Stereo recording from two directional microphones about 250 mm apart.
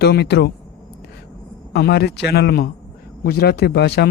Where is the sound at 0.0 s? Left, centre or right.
Left.